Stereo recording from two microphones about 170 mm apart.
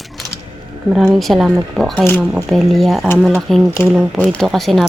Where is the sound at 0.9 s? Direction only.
Centre (ahead or behind).